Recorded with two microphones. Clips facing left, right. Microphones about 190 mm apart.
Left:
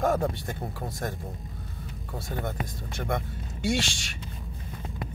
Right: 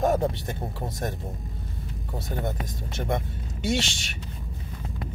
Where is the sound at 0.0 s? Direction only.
20° right (ahead or behind).